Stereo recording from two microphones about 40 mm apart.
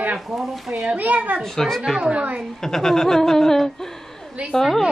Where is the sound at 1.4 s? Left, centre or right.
Centre.